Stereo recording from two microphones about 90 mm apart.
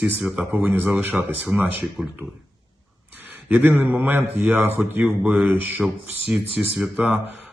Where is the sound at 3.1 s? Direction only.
20° right (ahead or behind).